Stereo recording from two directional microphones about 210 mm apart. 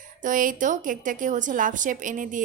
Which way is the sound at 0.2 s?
40° right (ahead or behind).